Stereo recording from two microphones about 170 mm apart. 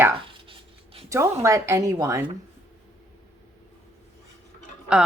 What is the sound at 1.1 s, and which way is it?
A woman's voice, 15° right (ahead or behind).